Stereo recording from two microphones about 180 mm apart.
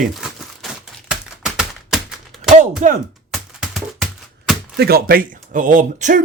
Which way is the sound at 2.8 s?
40° right (ahead or behind).